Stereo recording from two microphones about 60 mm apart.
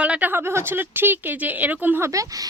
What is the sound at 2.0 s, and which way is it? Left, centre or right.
Speech, right.